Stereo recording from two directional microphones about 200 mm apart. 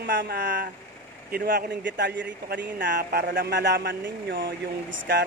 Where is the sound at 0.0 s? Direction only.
55° right (ahead or behind).